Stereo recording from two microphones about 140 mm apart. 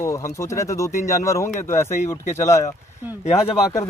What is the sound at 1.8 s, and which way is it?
Speech, 55° left (ahead or behind).